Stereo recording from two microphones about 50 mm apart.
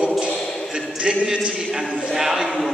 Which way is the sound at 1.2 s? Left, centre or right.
Centre.